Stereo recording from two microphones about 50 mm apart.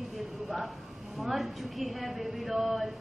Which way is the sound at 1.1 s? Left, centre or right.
Centre.